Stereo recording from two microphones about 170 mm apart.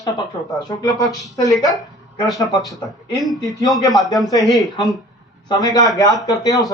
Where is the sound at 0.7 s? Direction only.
20° left (ahead or behind).